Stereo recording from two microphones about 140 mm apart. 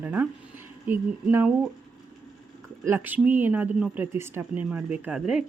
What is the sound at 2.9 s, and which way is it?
Speech, 15° right (ahead or behind).